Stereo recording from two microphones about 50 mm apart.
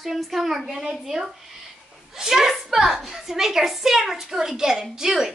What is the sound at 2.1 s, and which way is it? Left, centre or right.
A woman's voice, centre.